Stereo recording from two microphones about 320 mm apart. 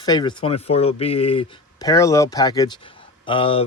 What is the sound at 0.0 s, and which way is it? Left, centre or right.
Speech, centre.